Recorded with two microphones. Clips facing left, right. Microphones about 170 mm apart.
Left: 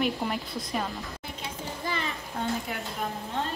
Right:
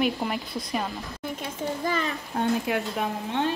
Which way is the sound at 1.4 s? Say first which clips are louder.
Right 6 dB; 45° right (ahead or behind).